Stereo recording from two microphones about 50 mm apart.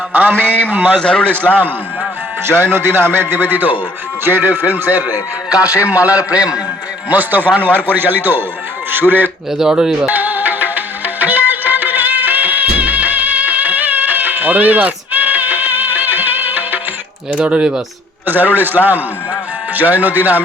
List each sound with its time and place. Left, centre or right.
0.1 s speech: right
0.9 s a man's voice: centre
2.5 s music: right
4.2 s a man's voice: right
7.7 s a man's voice: left
7.9 s music: right
8.9 s speech: right
9.5 s speech: centre
10.1 s music: right
17.3 s a man's voice: centre
18.3 s speech: right